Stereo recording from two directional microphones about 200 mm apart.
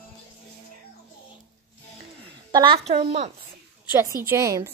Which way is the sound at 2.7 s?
30° right (ahead or behind).